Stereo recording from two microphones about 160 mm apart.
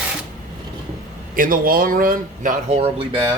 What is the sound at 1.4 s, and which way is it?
Speech, 60° right (ahead or behind).